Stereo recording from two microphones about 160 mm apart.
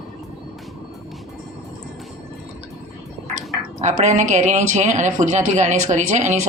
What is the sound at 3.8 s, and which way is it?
Speech, 45° right (ahead or behind).